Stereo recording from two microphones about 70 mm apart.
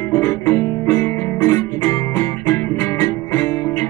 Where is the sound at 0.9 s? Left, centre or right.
Left.